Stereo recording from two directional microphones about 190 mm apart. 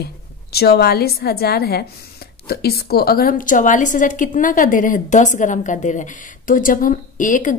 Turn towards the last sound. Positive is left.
turn(degrees=40)  # may be behind; listen again after turning